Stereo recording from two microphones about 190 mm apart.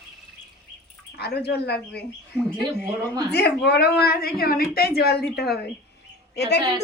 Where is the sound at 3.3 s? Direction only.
60° left (ahead or behind).